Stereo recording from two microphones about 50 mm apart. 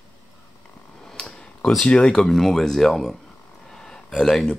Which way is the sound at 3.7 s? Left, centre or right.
Centre.